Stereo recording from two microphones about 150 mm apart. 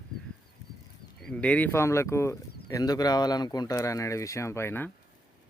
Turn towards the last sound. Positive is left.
turn(degrees=15)  # may be behind; listen again after turning